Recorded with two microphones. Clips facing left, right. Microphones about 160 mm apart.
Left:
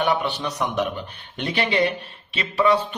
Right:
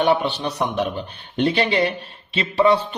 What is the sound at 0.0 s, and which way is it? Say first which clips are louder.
Speech: right 3 dB; 30° right (ahead or behind).